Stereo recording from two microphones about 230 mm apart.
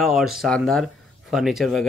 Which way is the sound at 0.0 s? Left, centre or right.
Centre.